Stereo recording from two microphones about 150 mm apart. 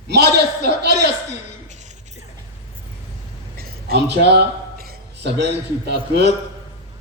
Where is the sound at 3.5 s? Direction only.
90° right.